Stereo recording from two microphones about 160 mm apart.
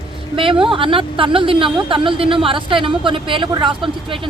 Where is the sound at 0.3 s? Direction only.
35° right (ahead or behind).